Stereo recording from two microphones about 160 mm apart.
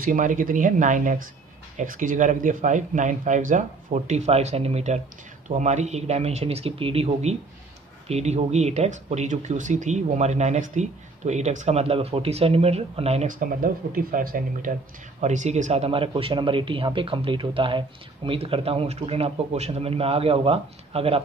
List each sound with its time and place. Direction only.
0.0 s speech: 55° right (ahead or behind); by 21.2 s 35° right (ahead or behind)